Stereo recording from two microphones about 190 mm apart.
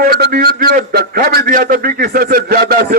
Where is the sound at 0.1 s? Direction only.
55° right (ahead or behind).